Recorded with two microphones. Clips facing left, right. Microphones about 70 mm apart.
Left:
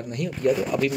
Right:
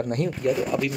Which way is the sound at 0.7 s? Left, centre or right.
Right.